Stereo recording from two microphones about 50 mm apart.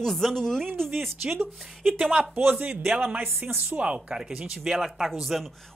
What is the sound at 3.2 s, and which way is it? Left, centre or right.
Speech, right.